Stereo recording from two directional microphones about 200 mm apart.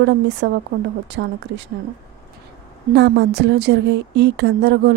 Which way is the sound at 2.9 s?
60° right (ahead or behind).